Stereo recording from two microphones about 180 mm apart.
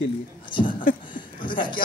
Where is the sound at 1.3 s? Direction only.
50° left (ahead or behind).